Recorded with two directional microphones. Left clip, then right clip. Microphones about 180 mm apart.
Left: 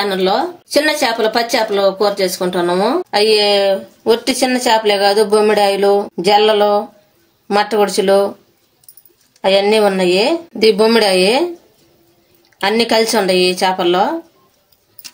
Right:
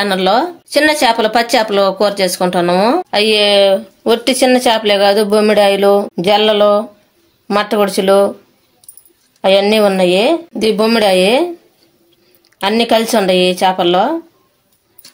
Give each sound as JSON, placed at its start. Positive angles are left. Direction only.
{"t": 0.0, "sound": "a woman's voice", "side_deg": -50}
{"t": 9.4, "sound": "speech", "side_deg": -40}
{"t": 12.5, "sound": "speech", "side_deg": -35}